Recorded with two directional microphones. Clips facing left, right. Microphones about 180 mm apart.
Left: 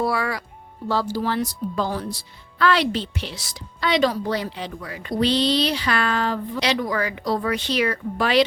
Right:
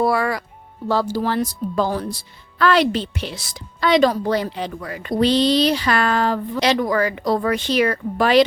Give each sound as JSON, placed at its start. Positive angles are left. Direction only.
{"t": 0.0, "sound": "speech", "side_deg": -50}